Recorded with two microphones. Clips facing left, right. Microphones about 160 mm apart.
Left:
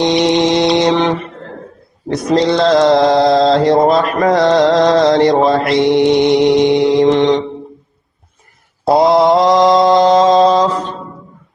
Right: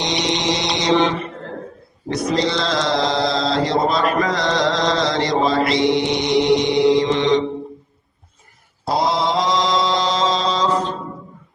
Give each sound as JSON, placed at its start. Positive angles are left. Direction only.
{"t": 0.0, "sound": "mantra", "side_deg": 55}
{"t": 2.5, "sound": "mantra", "side_deg": 55}
{"t": 4.2, "sound": "a sound", "side_deg": 55}
{"t": 4.6, "sound": "mantra", "side_deg": 50}
{"t": 8.9, "sound": "mantra", "side_deg": 55}